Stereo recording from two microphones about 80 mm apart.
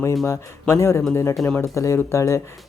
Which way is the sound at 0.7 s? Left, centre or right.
Left.